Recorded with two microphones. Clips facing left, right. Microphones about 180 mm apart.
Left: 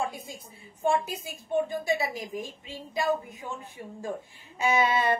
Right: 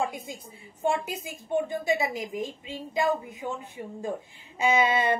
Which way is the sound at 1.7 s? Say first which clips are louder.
Right 2 dB; 20° right (ahead or behind).